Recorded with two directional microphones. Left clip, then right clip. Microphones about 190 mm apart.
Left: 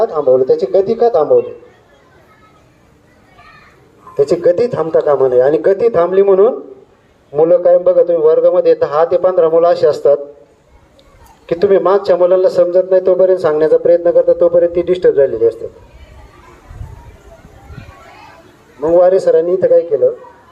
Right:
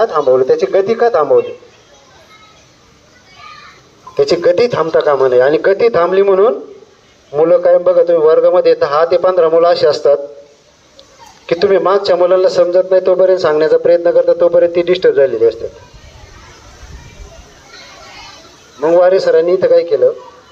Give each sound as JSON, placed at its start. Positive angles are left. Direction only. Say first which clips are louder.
{"t": 0.0, "sound": "speech", "louder": "right 1 dB", "side_deg": -10}
{"t": 0.5, "sound": "speech", "louder": "even", "side_deg": 10}
{"t": 1.2, "sound": "speech", "louder": "even", "side_deg": -10}
{"t": 4.2, "sound": "a man's voice", "louder": "right 1 dB", "side_deg": 25}
{"t": 11.4, "sound": "a man's voice", "louder": "even", "side_deg": 20}
{"t": 18.8, "sound": "a man's voice", "louder": "even", "side_deg": 20}
{"t": 19.9, "sound": "speech", "louder": "right 1 dB", "side_deg": 10}